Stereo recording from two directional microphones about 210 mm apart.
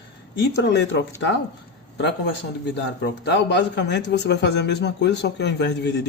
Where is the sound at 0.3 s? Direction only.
55° left (ahead or behind).